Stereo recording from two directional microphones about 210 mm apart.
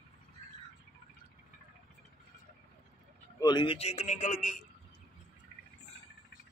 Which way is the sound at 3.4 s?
20° left (ahead or behind).